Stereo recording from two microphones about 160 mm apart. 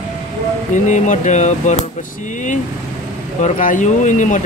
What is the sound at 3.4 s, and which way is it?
Speech, 55° left (ahead or behind).